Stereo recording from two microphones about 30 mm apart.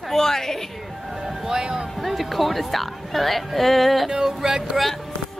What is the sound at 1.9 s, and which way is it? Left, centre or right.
Speech, centre.